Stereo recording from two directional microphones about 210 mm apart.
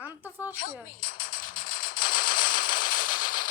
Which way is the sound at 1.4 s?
40° left (ahead or behind).